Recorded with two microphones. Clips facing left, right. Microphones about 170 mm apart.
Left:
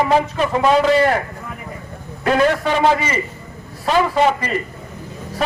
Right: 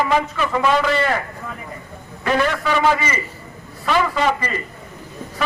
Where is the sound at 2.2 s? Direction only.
35° left (ahead or behind).